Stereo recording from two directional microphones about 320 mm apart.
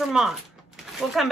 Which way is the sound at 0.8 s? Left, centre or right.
Centre.